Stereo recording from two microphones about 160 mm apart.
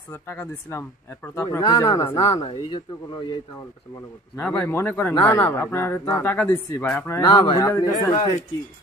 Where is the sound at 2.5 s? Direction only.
35° left (ahead or behind).